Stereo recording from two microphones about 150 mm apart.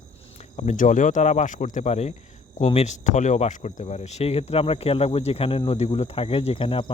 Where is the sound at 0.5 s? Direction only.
50° left (ahead or behind).